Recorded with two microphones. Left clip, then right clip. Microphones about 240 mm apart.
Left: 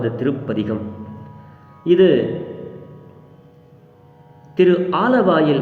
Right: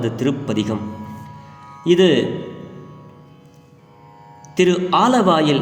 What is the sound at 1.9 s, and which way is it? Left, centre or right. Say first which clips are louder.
Speech: left 1 dB; right.